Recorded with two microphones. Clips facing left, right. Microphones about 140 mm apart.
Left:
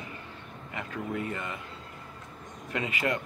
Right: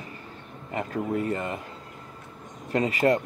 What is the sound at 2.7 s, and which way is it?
Speech, 40° right (ahead or behind).